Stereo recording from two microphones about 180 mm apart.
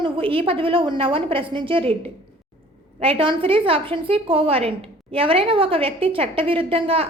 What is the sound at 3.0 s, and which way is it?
A woman's voice, 30° right (ahead or behind).